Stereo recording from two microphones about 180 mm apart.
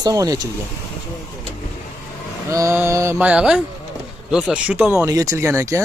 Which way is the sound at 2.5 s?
15° right (ahead or behind).